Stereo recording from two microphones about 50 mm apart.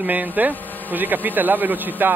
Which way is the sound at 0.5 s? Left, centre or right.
Left.